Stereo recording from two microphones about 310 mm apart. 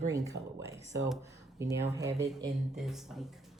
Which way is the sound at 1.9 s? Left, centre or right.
Centre.